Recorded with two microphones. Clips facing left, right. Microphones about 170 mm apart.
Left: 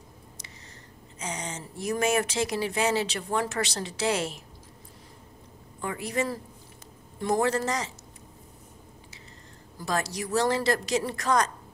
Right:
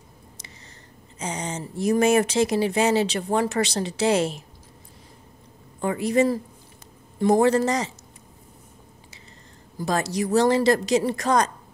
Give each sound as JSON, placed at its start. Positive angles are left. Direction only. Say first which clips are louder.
{"t": 1.2, "sound": "speech", "louder": "right 5 dB", "side_deg": -30}
{"t": 5.8, "sound": "speech", "louder": "right 9 dB", "side_deg": -25}
{"t": 9.8, "sound": "speech", "louder": "right 6 dB", "side_deg": -25}